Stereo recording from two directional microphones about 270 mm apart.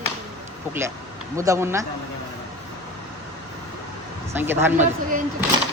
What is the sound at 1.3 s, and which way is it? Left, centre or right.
Speech, centre.